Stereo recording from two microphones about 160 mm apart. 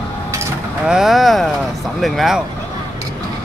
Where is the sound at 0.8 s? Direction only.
5° right (ahead or behind).